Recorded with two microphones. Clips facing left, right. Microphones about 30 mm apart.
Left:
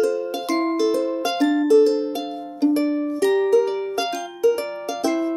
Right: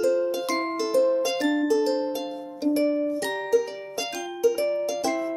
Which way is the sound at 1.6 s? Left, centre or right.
Centre.